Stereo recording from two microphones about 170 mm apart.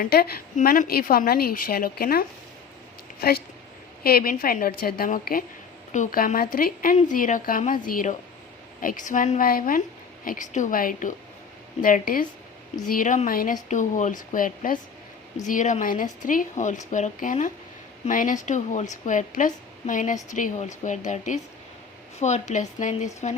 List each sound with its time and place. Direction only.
0.0 s a woman's voice: 65° left (ahead or behind)
0.5 s a woman's voice: 55° left (ahead or behind)